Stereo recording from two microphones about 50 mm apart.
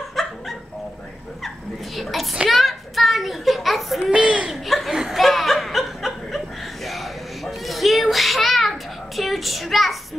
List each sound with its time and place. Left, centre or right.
0.1 s dog: centre
2.0 s a child's voice: centre
2.5 s a sound: centre
4.1 s a sound: right
4.5 s laughter: centre
5.2 s chuckle: centre